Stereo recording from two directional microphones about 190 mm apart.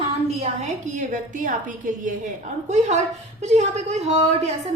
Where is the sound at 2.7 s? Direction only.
35° right (ahead or behind).